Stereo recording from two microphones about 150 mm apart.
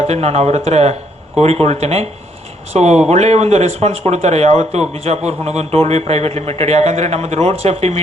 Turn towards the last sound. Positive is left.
turn(degrees=-45)  # may be behind; listen again after turning